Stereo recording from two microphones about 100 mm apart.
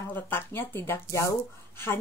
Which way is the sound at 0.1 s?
20° left (ahead or behind).